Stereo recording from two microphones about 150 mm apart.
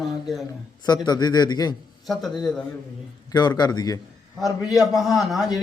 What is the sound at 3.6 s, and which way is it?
Speech, 25° left (ahead or behind).